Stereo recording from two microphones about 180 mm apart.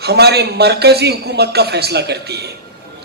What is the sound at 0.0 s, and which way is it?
A man's voice, 65° right (ahead or behind).